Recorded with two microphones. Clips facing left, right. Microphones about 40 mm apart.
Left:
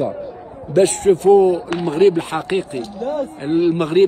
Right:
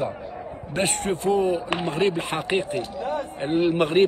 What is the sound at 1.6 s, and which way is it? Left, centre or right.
Speech, right.